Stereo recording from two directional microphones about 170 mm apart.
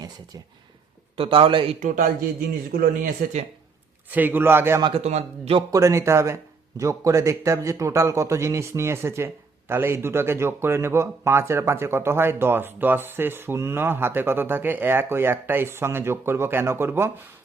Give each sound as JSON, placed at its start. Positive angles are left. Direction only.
{"t": 1.1, "sound": "speech", "side_deg": -30}
{"t": 1.8, "sound": "a man's voice", "side_deg": -50}
{"t": 2.7, "sound": "speech", "side_deg": -60}
{"t": 4.1, "sound": "a man's voice", "side_deg": -10}
{"t": 4.8, "sound": "speech", "side_deg": -35}
{"t": 5.7, "sound": "a man's voice", "side_deg": -15}